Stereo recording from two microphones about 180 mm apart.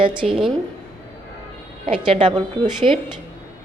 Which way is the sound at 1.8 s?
30° right (ahead or behind).